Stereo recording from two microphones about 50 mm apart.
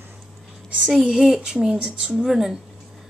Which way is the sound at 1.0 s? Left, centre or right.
Centre.